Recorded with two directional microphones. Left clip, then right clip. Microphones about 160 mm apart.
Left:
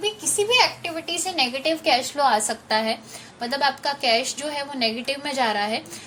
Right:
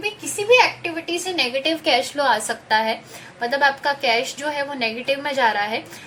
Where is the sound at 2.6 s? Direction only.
45° left (ahead or behind).